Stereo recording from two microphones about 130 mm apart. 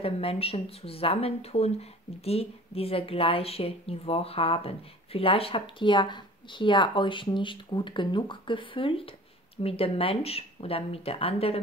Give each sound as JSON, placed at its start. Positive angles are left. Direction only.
{"t": 0.0, "sound": "speech", "side_deg": 50}